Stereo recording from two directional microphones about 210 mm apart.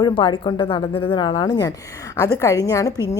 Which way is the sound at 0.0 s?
20° left (ahead or behind).